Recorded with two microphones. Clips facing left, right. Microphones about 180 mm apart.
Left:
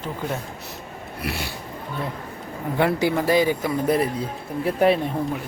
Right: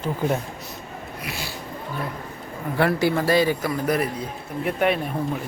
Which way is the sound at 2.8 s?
15° left (ahead or behind).